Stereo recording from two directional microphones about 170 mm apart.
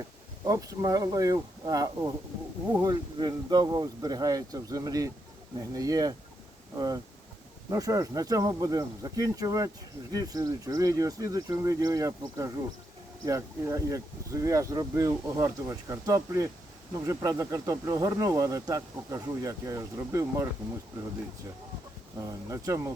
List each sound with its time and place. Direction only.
0.4 s speech: 20° right (ahead or behind)
22.2 s speech: 20° right (ahead or behind)